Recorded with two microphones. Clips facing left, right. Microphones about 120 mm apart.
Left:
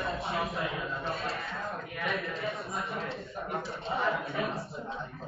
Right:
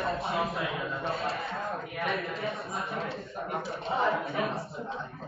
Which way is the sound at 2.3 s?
Centre (ahead or behind).